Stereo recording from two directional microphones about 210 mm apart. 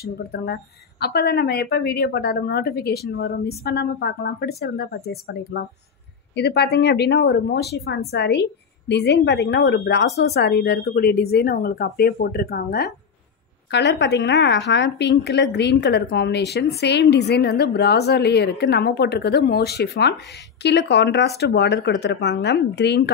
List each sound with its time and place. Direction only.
0.0 s a woman's voice: 50° left (ahead or behind)